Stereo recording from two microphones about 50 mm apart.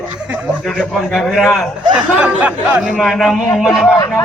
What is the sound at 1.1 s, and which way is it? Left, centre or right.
Speech, centre.